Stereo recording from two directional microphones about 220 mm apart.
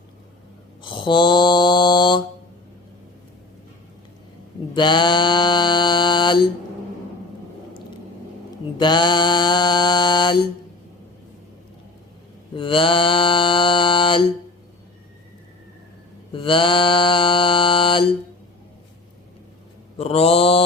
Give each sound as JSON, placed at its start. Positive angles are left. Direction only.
{"t": 0.8, "sound": "mantra", "side_deg": 20}
{"t": 4.7, "sound": "mantra", "side_deg": 20}
{"t": 8.8, "sound": "mantra", "side_deg": 20}
{"t": 12.5, "sound": "mantra", "side_deg": 25}
{"t": 16.3, "sound": "mantra", "side_deg": 25}
{"t": 20.0, "sound": "mantra", "side_deg": 25}